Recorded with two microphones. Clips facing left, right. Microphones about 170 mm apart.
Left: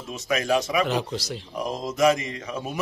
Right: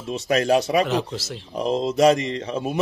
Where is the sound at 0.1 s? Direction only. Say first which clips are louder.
Right 4 dB; 35° right (ahead or behind).